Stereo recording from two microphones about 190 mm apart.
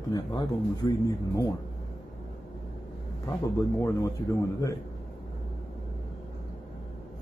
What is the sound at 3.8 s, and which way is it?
Speech, 15° left (ahead or behind).